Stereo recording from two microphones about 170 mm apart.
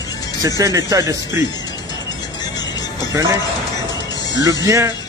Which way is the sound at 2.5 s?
25° left (ahead or behind).